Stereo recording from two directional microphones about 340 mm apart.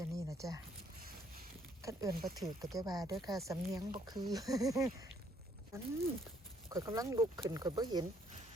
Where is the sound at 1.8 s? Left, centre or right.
Centre.